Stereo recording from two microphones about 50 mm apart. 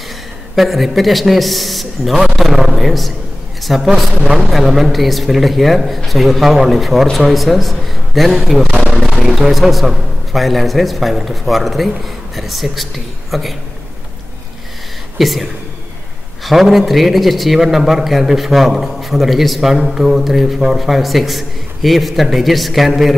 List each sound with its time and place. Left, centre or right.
0.6 s a man's voice: centre
15.1 s speech: centre
16.4 s a man's voice: centre